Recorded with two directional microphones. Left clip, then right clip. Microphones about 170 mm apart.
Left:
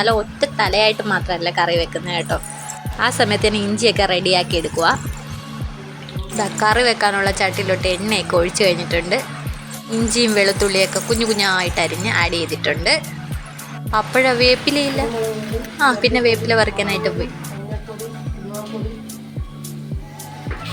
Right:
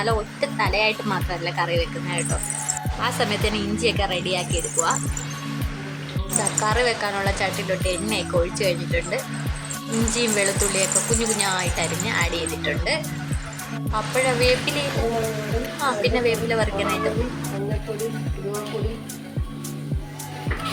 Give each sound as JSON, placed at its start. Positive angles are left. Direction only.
{"t": 0.0, "sound": "speech", "side_deg": 20}
{"t": 6.4, "sound": "speech", "side_deg": 25}